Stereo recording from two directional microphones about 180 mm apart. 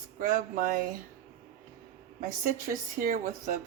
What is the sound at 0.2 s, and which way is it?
Speech, 50° right (ahead or behind).